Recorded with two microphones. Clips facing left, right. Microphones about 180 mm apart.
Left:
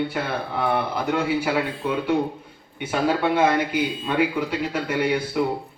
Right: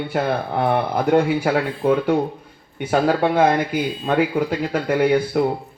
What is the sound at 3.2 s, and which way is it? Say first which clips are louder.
A man's voice: right 3 dB; 45° right (ahead or behind).